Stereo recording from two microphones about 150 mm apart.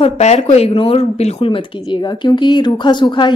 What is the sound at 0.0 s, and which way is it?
Speech, 45° left (ahead or behind).